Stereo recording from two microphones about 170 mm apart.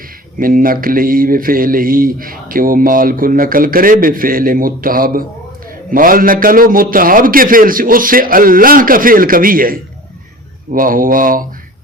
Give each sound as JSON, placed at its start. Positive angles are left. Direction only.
{"t": 0.3, "sound": "speech", "side_deg": -55}